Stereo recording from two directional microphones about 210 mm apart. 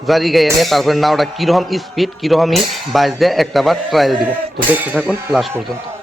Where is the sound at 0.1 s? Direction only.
Centre (ahead or behind).